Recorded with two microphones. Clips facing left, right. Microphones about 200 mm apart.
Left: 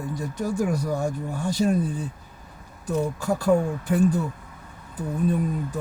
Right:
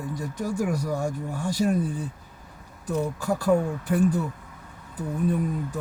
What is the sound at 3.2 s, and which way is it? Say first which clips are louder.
Speech: left 1 dB; 25° left (ahead or behind).